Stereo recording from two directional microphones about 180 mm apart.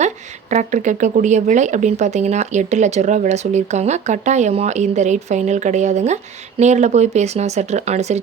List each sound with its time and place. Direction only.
0.5 s speech: 45° right (ahead or behind)